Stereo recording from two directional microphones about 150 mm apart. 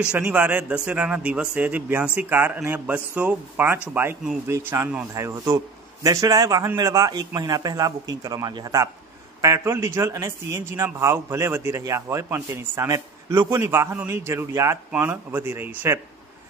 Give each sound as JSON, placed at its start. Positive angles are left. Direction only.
{"t": 0.0, "sound": "a man's voice", "side_deg": -10}